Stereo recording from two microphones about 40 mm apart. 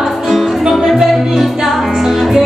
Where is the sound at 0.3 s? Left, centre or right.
Centre.